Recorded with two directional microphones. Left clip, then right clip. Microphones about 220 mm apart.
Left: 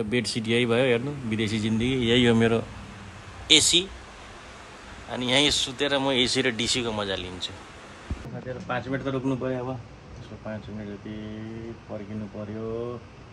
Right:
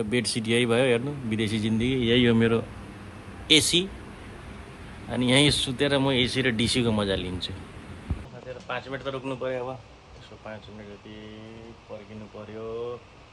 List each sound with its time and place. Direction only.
0.0 s speech: 15° left (ahead or behind)
2.0 s speech: 30° left (ahead or behind)
5.1 s speech: 15° left (ahead or behind)
8.7 s speech: 50° right (ahead or behind)